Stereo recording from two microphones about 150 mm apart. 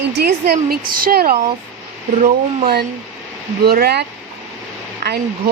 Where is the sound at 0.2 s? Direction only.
90° right.